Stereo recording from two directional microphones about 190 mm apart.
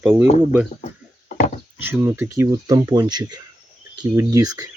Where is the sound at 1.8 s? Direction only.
10° right (ahead or behind).